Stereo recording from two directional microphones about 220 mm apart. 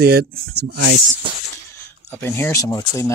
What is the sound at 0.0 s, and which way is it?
Speech, 45° right (ahead or behind).